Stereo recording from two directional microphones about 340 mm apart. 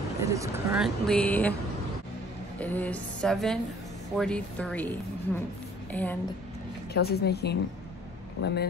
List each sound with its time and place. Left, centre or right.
0.2 s speech: centre
2.6 s speech: centre
6.9 s a woman's voice: left